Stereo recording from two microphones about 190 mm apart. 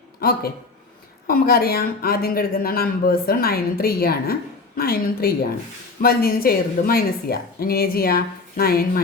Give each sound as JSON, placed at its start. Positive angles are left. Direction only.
{"t": 0.2, "sound": "speech", "side_deg": 50}